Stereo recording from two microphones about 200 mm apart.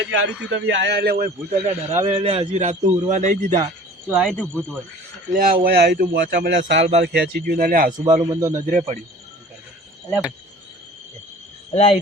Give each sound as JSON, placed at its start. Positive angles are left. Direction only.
{"t": 0.0, "sound": "a man's voice", "side_deg": -70}
{"t": 4.1, "sound": "speech", "side_deg": 0}
{"t": 5.3, "sound": "a man's voice", "side_deg": -45}
{"t": 7.9, "sound": "a man's voice", "side_deg": -15}
{"t": 8.5, "sound": "a man's voice", "side_deg": -40}
{"t": 11.7, "sound": "speech", "side_deg": 30}